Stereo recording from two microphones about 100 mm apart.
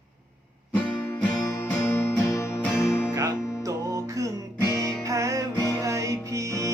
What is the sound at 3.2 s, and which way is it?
Music, 40° right (ahead or behind).